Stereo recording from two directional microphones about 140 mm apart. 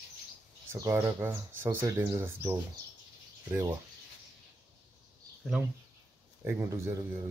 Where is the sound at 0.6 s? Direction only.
20° right (ahead or behind).